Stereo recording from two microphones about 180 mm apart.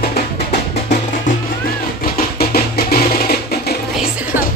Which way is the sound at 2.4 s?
60° left (ahead or behind).